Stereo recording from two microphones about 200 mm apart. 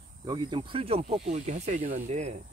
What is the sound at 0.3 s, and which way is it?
Speech, 25° right (ahead or behind).